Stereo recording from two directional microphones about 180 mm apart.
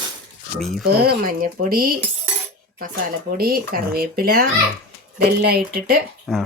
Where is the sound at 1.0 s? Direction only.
55° right (ahead or behind).